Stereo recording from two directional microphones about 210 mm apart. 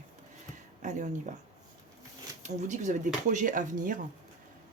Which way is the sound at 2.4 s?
35° right (ahead or behind).